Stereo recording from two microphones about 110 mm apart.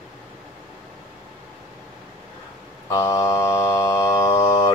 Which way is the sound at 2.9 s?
25° left (ahead or behind).